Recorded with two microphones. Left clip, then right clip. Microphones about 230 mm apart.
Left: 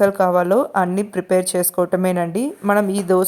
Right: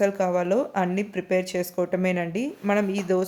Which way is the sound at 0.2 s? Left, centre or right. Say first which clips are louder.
Left 7 dB; centre.